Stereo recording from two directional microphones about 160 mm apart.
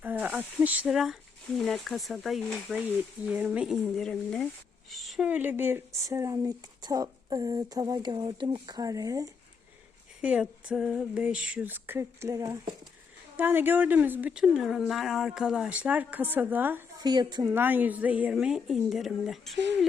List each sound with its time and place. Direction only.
0.0 s a woman's voice: 10° right (ahead or behind)
10.2 s a woman's voice: 10° right (ahead or behind)
17.0 s speech: 25° right (ahead or behind)
17.5 s a woman's voice: 10° right (ahead or behind)